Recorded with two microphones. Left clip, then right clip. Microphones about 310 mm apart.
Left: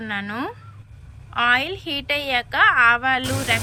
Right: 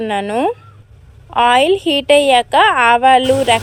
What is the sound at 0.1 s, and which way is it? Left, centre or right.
A woman's voice, centre.